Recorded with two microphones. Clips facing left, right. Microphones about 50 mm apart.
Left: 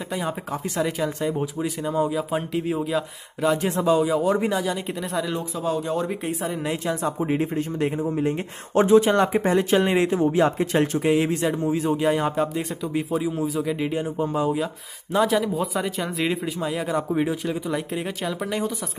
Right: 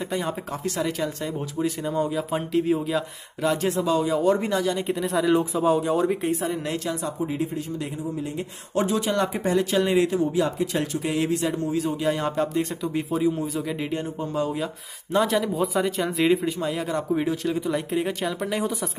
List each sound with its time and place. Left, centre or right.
0.1 s speech: centre
5.6 s speech: centre
5.9 s speech: centre
7.0 s speech: left; by 14.5 s centre
15.1 s speech: centre